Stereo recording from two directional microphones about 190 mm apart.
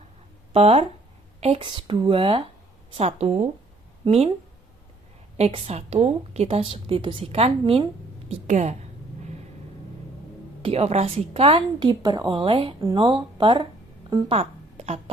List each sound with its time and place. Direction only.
0.5 s a woman's voice: 35° right (ahead or behind)
5.4 s a woman's voice: 30° right (ahead or behind)
10.6 s a woman's voice: 35° right (ahead or behind)